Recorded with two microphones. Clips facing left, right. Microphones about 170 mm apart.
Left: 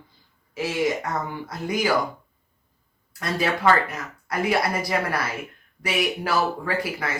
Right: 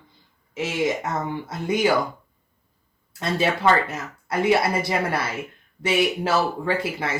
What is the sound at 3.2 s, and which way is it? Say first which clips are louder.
Speech: right 1 dB; 25° right (ahead or behind).